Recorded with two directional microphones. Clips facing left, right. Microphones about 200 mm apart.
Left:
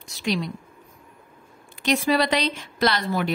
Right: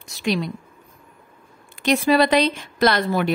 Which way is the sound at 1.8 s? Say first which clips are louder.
Right 4 dB; 55° right (ahead or behind).